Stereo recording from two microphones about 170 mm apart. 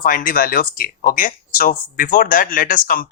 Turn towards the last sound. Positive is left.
turn(degrees=55)  # may be behind; listen again after turning